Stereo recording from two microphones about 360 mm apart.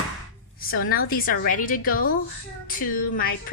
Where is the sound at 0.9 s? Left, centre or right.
Left.